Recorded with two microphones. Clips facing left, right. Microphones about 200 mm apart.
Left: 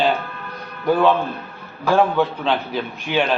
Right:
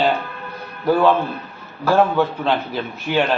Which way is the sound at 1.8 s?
10° right (ahead or behind).